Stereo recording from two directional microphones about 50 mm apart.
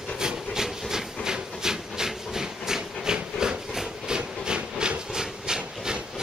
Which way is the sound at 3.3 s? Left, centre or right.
Centre.